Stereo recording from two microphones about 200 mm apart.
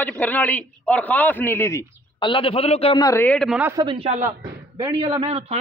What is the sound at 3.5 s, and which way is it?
Speech, 10° right (ahead or behind).